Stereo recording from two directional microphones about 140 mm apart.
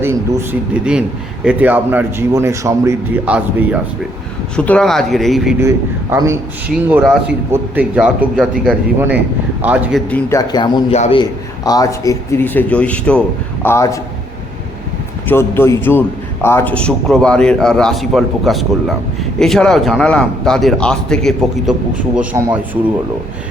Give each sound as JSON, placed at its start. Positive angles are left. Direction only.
{"t": 0.0, "sound": "a man's voice", "side_deg": -20}
{"t": 0.7, "sound": "a man's voice", "side_deg": -5}
{"t": 3.2, "sound": "a man's voice", "side_deg": -10}
{"t": 4.5, "sound": "a man's voice", "side_deg": 10}
{"t": 5.5, "sound": "a man's voice", "side_deg": -20}
{"t": 7.0, "sound": "a man's voice", "side_deg": 0}
{"t": 10.1, "sound": "speech", "side_deg": 20}
{"t": 10.9, "sound": "a man's voice", "side_deg": 50}
{"t": 11.2, "sound": "speech", "side_deg": 25}
{"t": 15.3, "sound": "speech", "side_deg": 15}
{"t": 16.7, "sound": "a man's voice", "side_deg": 5}
{"t": 21.7, "sound": "a man's voice", "side_deg": -5}